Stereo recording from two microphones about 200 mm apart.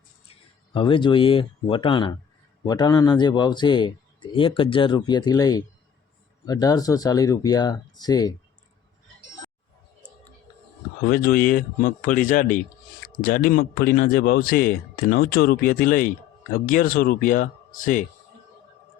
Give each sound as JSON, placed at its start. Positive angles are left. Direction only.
{"t": 0.7, "sound": "a man's voice", "side_deg": 25}
{"t": 11.0, "sound": "speech", "side_deg": 50}